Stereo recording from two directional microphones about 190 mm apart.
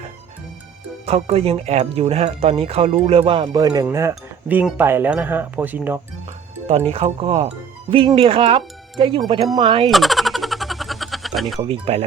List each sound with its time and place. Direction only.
1.0 s speech: 30° right (ahead or behind); by 4.1 s 15° right (ahead or behind)
4.1 s speech: 5° right (ahead or behind)
6.9 s speech: 30° right (ahead or behind)
9.8 s boing: centre (ahead or behind)
11.7 s speech: 30° right (ahead or behind)